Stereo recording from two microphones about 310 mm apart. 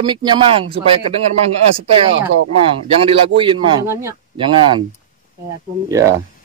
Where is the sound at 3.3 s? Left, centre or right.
Centre.